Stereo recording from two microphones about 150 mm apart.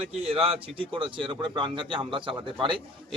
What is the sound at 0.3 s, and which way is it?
A man's voice, 40° right (ahead or behind).